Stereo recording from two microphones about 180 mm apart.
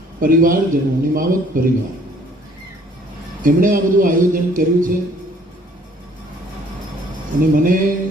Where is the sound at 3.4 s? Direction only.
50° right (ahead or behind).